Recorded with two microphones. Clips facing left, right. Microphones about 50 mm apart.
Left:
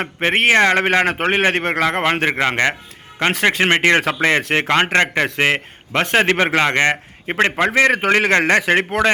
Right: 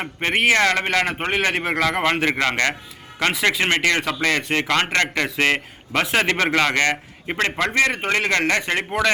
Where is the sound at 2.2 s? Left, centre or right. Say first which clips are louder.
Left 3 dB; left.